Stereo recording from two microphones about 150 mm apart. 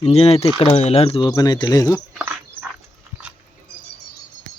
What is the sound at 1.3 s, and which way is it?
Speech, 25° left (ahead or behind).